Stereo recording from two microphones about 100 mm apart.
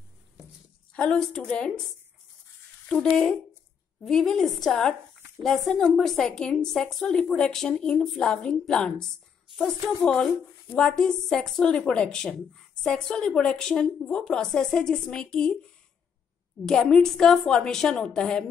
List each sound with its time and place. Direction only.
0.9 s a woman's voice: 10° left (ahead or behind)
2.9 s a woman's voice: 10° left (ahead or behind)
10.0 s speech: 10° left (ahead or behind)